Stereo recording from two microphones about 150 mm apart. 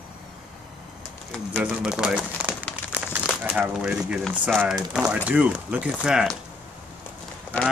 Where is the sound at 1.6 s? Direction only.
5° right (ahead or behind).